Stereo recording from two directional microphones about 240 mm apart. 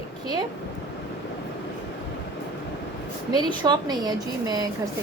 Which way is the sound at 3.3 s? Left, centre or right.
Centre.